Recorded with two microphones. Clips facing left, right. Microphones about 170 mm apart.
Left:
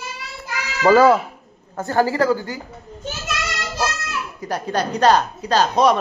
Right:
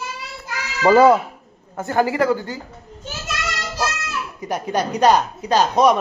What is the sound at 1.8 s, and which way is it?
Speech, 20° right (ahead or behind).